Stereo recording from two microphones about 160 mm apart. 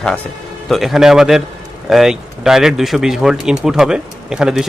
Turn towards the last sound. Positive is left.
turn(degrees=-5)  # may be behind; listen again after turning